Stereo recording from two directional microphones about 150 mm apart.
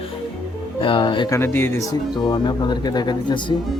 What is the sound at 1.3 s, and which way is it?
Music, 15° left (ahead or behind).